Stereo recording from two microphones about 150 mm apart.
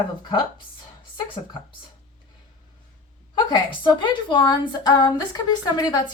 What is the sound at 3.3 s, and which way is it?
A woman's voice, 30° left (ahead or behind).